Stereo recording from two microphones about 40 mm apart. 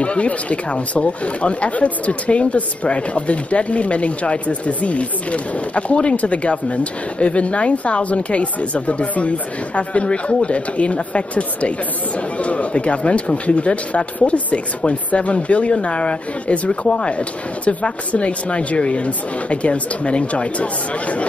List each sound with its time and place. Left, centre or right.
0.0 s speech: left